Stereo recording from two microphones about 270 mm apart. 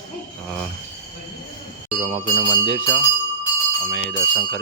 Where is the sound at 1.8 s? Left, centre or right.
Centre.